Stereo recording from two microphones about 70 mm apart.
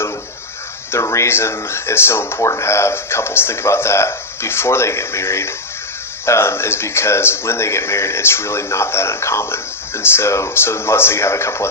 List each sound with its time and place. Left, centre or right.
0.9 s speech: left